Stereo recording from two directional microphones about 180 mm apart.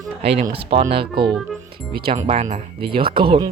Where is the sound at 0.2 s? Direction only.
35° right (ahead or behind).